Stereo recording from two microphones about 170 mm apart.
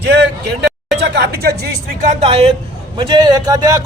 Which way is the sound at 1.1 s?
70° right (ahead or behind).